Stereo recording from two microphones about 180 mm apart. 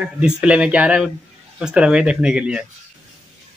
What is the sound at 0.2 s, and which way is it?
Speech, 5° right (ahead or behind).